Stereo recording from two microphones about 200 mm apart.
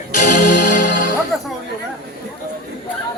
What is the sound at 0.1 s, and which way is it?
Music, 40° left (ahead or behind).